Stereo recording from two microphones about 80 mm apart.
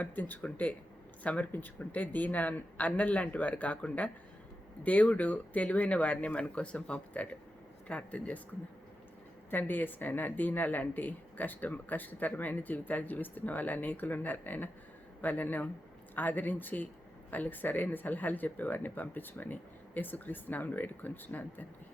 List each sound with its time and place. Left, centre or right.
0.0 s speech: centre
9.5 s speech: left